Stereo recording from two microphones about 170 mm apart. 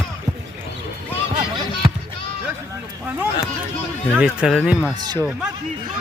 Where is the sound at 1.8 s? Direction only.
35° right (ahead or behind).